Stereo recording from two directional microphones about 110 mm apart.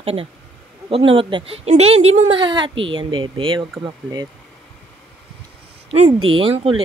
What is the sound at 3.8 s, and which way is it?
Speech, 35° right (ahead or behind).